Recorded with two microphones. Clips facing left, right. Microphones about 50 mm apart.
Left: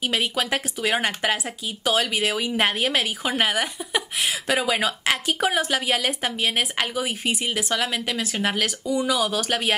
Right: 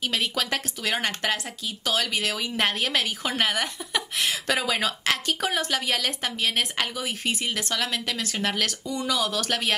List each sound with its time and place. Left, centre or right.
0.0 s a woman's voice: centre